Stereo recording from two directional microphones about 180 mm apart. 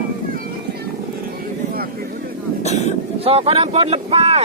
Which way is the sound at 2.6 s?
40° left (ahead or behind).